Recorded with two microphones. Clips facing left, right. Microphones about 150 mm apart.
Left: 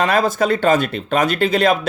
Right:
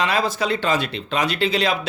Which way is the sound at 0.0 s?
50° left (ahead or behind).